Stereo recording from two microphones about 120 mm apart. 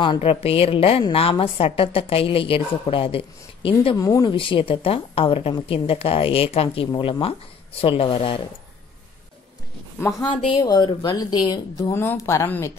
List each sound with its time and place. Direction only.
0.0 s a woman's voice: 45° left (ahead or behind)
3.9 s speech: 30° left (ahead or behind)
4.3 s a woman's voice: 45° left (ahead or behind)
10.2 s a woman's voice: 45° left (ahead or behind)
10.6 s speech: 35° left (ahead or behind)
11.9 s speech: 20° left (ahead or behind)